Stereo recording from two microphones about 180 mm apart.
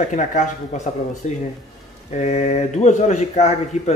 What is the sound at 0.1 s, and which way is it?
Speech, 40° left (ahead or behind).